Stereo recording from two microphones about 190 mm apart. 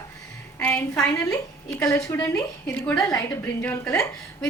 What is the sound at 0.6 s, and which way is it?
A woman's voice, 5° left (ahead or behind).